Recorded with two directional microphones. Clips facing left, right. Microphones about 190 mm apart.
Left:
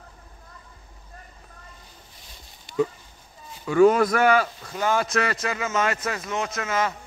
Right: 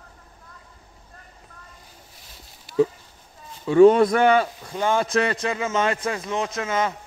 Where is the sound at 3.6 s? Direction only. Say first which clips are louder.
Right 4 dB; 30° right (ahead or behind).